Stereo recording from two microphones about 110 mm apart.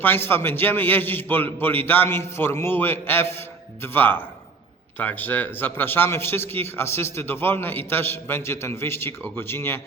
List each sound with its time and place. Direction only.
0.0 s a man's voice: 20° left (ahead or behind)